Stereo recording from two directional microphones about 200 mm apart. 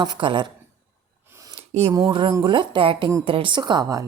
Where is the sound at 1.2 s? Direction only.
15° right (ahead or behind).